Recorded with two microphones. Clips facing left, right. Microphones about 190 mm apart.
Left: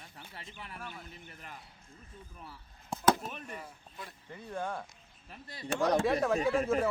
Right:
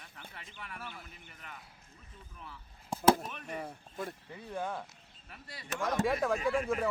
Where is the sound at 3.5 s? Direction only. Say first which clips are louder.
Right 5 dB; 50° right (ahead or behind).